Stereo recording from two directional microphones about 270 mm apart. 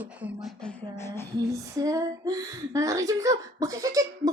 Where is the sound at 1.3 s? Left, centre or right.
Centre.